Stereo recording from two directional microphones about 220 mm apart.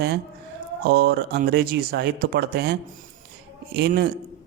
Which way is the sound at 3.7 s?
45° right (ahead or behind).